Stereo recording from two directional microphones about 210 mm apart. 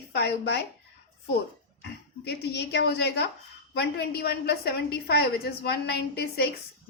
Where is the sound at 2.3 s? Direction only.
50° left (ahead or behind).